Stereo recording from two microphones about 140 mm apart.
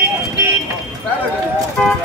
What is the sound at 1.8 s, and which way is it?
Clip-clop, 5° left (ahead or behind).